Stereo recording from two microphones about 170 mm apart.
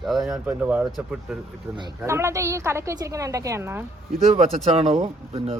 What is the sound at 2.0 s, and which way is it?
A woman's voice, 15° right (ahead or behind).